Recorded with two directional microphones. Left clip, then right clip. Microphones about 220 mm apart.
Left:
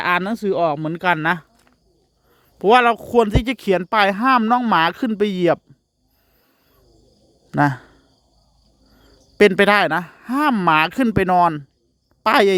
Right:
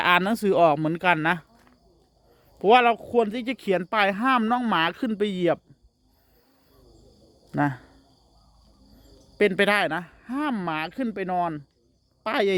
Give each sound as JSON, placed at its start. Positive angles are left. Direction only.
{"t": 0.0, "sound": "speech", "side_deg": 15}
{"t": 7.5, "sound": "a sound", "side_deg": 30}
{"t": 9.4, "sound": "speech", "side_deg": 25}